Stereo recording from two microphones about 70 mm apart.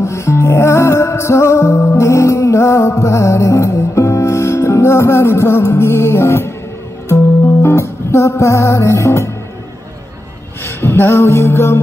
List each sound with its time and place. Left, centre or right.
0.0 s music: left
7.6 s music: left
10.6 s music: left